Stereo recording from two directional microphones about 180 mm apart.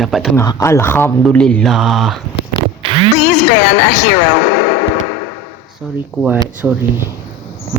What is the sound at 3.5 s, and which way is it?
A woman's voice, 70° left (ahead or behind).